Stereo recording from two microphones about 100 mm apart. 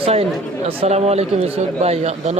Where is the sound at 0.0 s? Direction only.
80° right.